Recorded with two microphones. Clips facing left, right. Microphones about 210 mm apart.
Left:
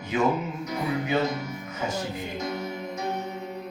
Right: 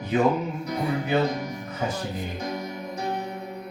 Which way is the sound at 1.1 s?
35° right (ahead or behind).